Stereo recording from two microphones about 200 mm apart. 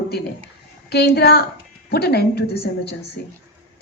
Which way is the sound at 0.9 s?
55° left (ahead or behind).